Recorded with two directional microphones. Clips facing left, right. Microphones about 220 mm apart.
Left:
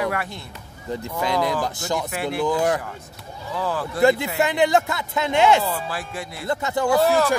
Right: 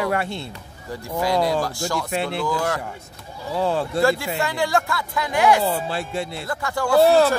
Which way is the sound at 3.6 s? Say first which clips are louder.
Right 4 dB; 25° right (ahead or behind).